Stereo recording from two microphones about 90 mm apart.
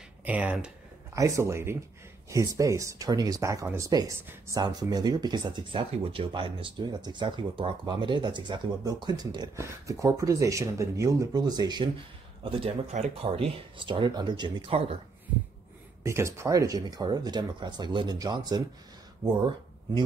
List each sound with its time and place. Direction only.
0.2 s speech: 15° right (ahead or behind)
1.1 s speech: 35° right (ahead or behind)
9.6 s speech: 35° right (ahead or behind)
12.4 s speech: 90° right
16.0 s speech: 30° right (ahead or behind); by 18.6 s 50° right (ahead or behind)